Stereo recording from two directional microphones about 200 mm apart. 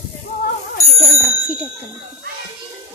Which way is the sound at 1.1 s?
10° right (ahead or behind).